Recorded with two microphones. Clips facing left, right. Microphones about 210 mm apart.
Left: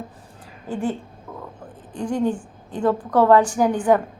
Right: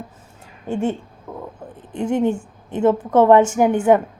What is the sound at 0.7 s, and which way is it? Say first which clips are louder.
A woman's voice: right 3 dB; 25° right (ahead or behind).